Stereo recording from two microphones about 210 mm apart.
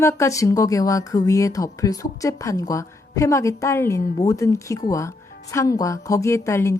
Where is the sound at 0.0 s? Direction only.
15° left (ahead or behind).